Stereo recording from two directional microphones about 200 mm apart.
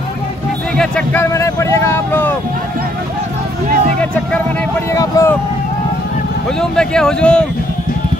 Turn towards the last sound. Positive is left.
turn(degrees=5)  # may be behind; listen again after turning